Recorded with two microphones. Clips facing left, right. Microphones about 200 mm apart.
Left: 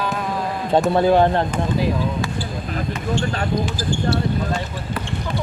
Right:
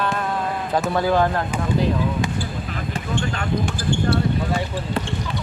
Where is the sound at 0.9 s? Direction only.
25° left (ahead or behind).